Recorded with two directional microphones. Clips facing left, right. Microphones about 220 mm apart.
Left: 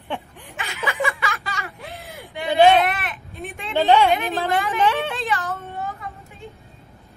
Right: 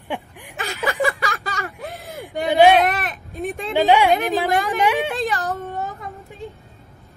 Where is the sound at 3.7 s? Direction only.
15° right (ahead or behind).